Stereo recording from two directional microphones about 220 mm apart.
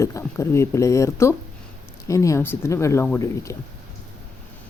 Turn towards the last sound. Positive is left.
turn(degrees=15)  # may be behind; listen again after turning